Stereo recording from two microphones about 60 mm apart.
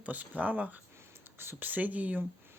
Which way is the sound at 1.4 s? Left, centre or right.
Right.